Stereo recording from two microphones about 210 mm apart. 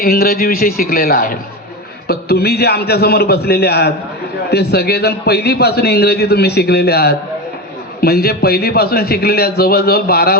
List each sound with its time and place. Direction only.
0.0 s a man's voice: 45° left (ahead or behind)